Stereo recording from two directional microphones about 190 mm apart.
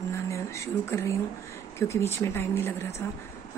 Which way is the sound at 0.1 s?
15° left (ahead or behind).